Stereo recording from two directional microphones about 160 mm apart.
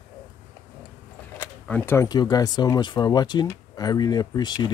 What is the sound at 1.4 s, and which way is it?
Speech, 10° left (ahead or behind).